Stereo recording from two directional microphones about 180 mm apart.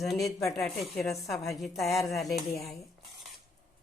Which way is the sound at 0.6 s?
Centre (ahead or behind).